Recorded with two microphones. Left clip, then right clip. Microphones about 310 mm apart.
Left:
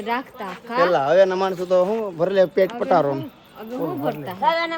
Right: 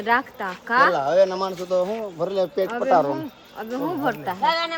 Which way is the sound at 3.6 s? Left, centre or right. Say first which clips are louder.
Right 1 dB; centre.